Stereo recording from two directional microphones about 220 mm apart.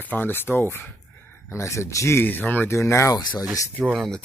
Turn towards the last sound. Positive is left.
turn(degrees=0)  # may be behind; listen again after turning